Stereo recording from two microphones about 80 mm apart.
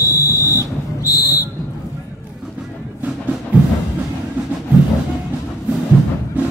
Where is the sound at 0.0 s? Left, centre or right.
Left.